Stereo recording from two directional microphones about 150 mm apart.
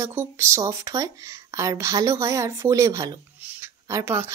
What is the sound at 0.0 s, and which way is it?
Speech, 15° right (ahead or behind).